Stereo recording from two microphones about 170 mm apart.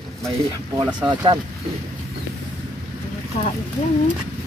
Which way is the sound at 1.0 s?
25° right (ahead or behind).